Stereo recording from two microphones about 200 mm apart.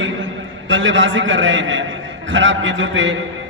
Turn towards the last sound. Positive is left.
turn(degrees=-70)  # may be behind; listen again after turning